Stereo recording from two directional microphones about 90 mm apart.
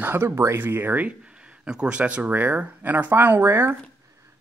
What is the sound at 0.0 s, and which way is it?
Speech, 25° right (ahead or behind).